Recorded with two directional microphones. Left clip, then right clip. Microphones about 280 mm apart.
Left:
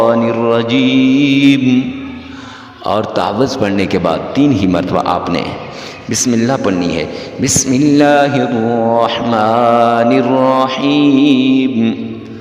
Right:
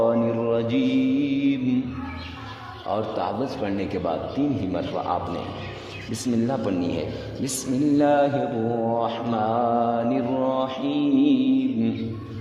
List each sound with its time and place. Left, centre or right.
0.0 s mantra: left
2.8 s mantra: left